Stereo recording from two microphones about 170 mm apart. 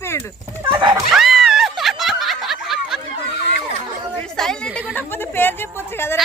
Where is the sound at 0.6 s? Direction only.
30° right (ahead or behind).